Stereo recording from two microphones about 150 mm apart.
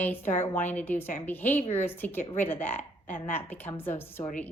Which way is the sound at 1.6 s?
45° left (ahead or behind).